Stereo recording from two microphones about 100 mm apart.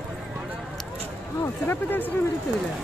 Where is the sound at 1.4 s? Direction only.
20° left (ahead or behind).